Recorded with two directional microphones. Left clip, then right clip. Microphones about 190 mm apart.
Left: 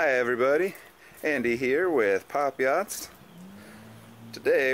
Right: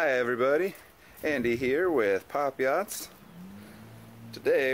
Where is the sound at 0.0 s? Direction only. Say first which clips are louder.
Left 2 dB; 15° left (ahead or behind).